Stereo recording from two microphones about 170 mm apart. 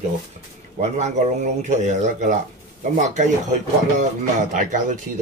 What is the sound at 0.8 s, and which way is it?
Speech, 45° right (ahead or behind).